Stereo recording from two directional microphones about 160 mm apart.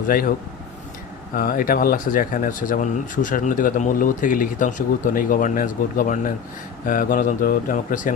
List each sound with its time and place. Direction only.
1.4 s speech: 65° left (ahead or behind)